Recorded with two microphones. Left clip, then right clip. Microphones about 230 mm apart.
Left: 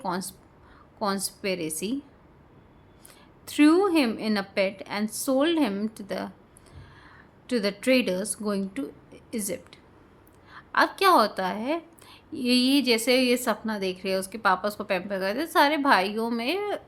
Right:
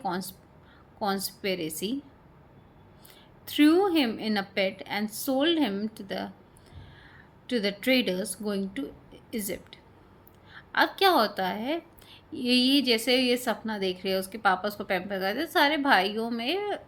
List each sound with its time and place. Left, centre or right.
0.0 s a woman's voice: centre
3.4 s a woman's voice: centre
7.4 s a woman's voice: centre